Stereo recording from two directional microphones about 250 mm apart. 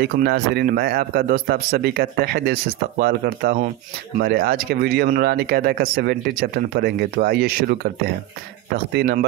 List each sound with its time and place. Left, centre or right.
0.0 s speech: right